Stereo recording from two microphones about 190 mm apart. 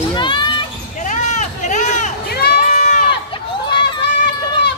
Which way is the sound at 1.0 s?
40° left (ahead or behind).